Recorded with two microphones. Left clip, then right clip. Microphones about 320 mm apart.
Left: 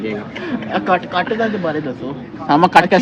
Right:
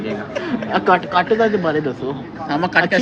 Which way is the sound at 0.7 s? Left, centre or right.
Right.